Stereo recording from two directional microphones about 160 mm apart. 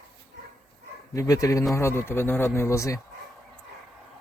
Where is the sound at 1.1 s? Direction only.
20° left (ahead or behind).